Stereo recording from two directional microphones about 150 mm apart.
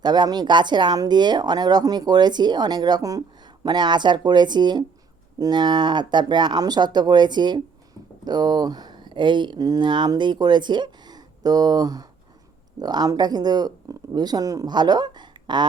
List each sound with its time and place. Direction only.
0.0 s speech: 30° right (ahead or behind)